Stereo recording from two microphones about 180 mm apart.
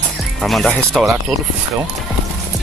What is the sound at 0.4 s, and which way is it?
Speech, centre (ahead or behind).